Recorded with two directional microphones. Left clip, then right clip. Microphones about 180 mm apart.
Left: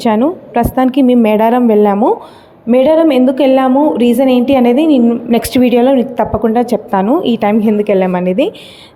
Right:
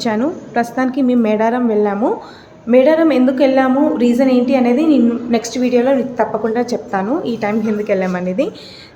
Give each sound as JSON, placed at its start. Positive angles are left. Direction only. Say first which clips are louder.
{"t": 0.0, "sound": "a woman's voice", "louder": "left 6 dB", "side_deg": 35}
{"t": 5.3, "sound": "a woman's voice", "louder": "left 7 dB", "side_deg": 40}